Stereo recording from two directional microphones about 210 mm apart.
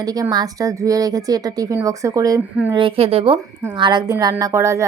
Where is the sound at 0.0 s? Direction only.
15° right (ahead or behind).